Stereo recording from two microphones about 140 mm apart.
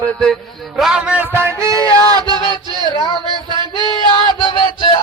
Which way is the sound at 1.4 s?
20° right (ahead or behind).